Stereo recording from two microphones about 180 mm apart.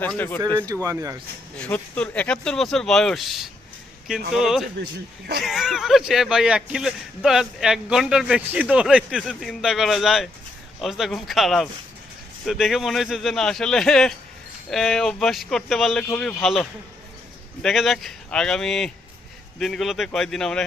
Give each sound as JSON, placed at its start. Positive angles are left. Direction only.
{"t": 0.0, "sound": "speech", "side_deg": 10}
{"t": 0.7, "sound": "speech", "side_deg": -20}
{"t": 1.5, "sound": "speech", "side_deg": 5}